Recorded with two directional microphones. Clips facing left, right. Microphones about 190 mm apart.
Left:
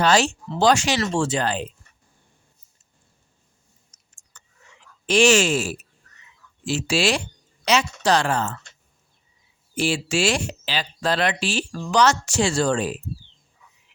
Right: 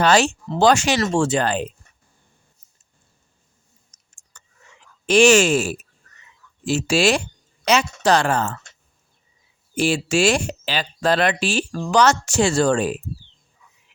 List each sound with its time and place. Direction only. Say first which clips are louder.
0.0 s speech: right 2 dB; 60° right (ahead or behind)
3.9 s clicking: left 1 dB; 45° right (ahead or behind)
4.3 s whispering: right 1 dB; 45° right (ahead or behind)
5.0 s speech: right 3 dB; 50° right (ahead or behind)
9.7 s speech: right 3 dB; 50° right (ahead or behind)